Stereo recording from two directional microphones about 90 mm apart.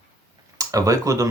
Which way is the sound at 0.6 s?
35° right (ahead or behind).